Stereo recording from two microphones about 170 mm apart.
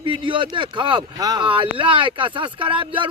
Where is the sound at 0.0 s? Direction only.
30° right (ahead or behind).